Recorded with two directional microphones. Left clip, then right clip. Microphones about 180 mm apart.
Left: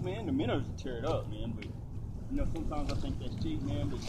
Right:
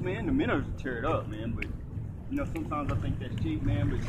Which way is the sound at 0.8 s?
15° right (ahead or behind).